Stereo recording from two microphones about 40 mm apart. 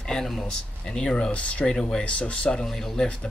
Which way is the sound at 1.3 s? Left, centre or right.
Left.